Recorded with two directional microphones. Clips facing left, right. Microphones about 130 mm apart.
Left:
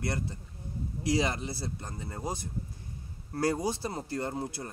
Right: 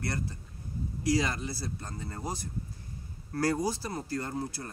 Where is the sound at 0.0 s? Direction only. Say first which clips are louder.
Left 1 dB; 20° left (ahead or behind).